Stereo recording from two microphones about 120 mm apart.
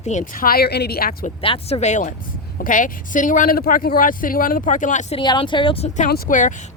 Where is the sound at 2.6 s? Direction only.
90° left.